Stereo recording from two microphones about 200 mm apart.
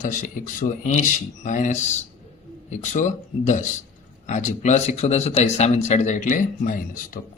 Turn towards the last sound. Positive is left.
turn(degrees=45)  # may be behind; listen again after turning